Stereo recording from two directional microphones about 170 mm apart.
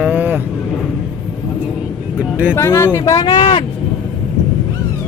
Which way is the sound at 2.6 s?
15° left (ahead or behind).